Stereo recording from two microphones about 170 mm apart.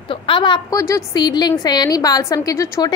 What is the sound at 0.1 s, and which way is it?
A woman's voice, 30° left (ahead or behind).